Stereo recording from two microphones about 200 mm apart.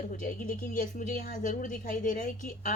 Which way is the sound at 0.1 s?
45° left (ahead or behind).